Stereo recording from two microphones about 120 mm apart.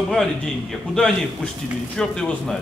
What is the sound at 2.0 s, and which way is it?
Speech, 5° left (ahead or behind).